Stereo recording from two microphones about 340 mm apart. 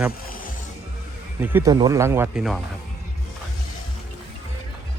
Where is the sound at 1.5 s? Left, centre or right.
Centre.